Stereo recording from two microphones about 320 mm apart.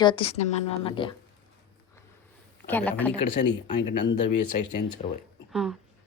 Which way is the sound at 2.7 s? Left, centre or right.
Centre.